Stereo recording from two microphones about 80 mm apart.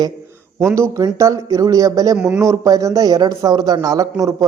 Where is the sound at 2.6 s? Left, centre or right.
Right.